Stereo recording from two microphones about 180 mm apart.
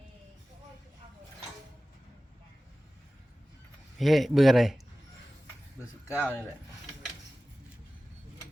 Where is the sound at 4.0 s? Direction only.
Centre (ahead or behind).